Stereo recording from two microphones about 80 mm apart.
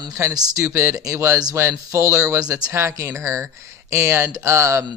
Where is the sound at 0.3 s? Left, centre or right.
Right.